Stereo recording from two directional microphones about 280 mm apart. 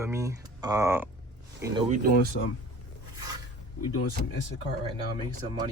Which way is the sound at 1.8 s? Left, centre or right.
Right.